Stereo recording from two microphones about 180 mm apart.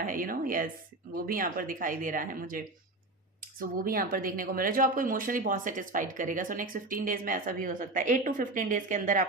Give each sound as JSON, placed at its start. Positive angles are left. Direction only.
{"t": 0.0, "sound": "a woman's voice", "side_deg": -50}